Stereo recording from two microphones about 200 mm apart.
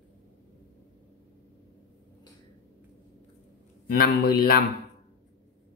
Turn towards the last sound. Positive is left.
turn(degrees=50)  # may be behind; listen again after turning